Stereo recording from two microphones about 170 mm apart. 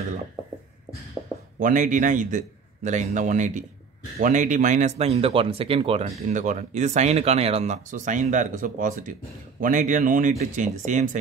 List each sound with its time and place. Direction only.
1.6 s speech: 50° right (ahead or behind)